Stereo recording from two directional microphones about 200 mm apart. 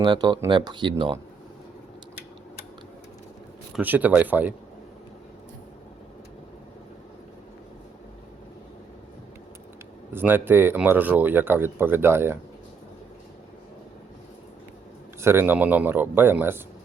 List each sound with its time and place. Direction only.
0.0 s speech: 20° right (ahead or behind)
3.8 s speech: 10° right (ahead or behind)
10.1 s speech: 10° right (ahead or behind)
15.2 s speech: 10° right (ahead or behind)